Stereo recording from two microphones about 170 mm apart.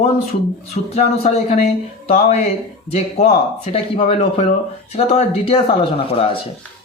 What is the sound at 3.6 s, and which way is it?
Speech, 35° left (ahead or behind).